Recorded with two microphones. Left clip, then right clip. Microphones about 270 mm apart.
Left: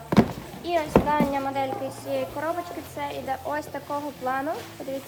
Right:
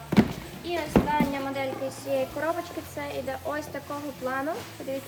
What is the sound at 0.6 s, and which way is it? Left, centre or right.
Speech, centre.